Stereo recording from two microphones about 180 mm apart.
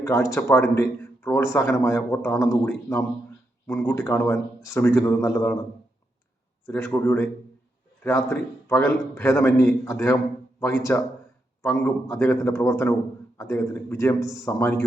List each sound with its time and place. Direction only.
0.0 s a man's voice: 15° left (ahead or behind)
6.7 s a man's voice: 15° left (ahead or behind)